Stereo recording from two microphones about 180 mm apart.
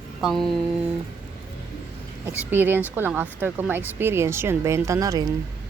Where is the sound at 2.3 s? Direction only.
10° right (ahead or behind).